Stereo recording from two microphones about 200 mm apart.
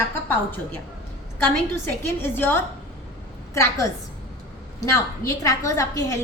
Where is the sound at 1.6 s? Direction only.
10° left (ahead or behind).